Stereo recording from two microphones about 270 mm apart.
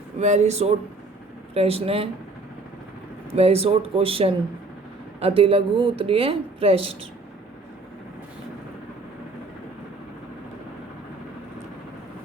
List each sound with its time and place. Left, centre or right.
0.2 s speech: right
3.3 s speech: right